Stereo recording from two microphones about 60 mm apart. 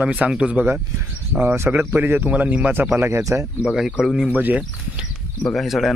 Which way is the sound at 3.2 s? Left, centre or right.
Right.